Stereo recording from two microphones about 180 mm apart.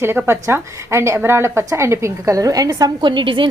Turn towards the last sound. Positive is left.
turn(degrees=-25)  # may be behind; listen again after turning